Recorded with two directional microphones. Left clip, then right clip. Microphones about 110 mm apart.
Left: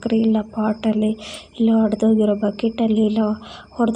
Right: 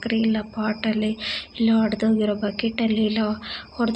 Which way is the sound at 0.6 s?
50° left (ahead or behind).